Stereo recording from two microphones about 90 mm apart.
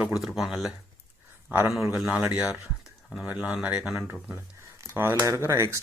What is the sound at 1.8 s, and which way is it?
Speech, 30° right (ahead or behind).